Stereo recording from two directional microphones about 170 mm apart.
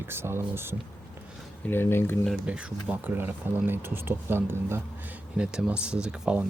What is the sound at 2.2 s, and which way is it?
Speech, centre (ahead or behind).